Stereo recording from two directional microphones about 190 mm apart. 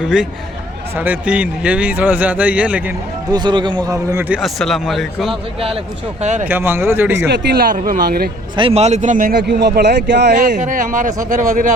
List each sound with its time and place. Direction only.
0.9 s a man's voice: 10° right (ahead or behind)
3.2 s a man's voice: 20° right (ahead or behind)
4.3 s speech: centre (ahead or behind)
6.4 s a man's voice: 10° right (ahead or behind)
7.3 s speech: 55° right (ahead or behind)
8.5 s speech: 30° right (ahead or behind); by 11.7 s 45° right (ahead or behind)